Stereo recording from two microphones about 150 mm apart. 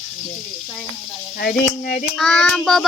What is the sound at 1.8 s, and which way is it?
Child singing, 70° left (ahead or behind).